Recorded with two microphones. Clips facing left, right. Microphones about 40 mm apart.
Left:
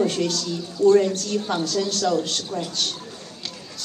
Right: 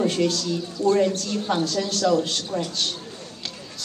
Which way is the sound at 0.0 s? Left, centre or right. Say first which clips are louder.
Right 1 dB; right.